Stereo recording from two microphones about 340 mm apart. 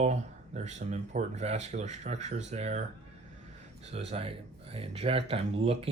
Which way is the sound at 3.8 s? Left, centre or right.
Centre.